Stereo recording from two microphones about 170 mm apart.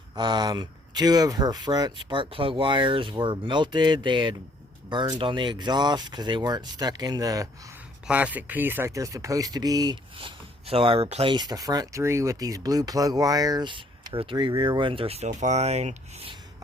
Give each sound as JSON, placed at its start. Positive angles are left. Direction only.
{"t": 0.2, "sound": "speech", "side_deg": -25}
{"t": 8.0, "sound": "speech", "side_deg": -10}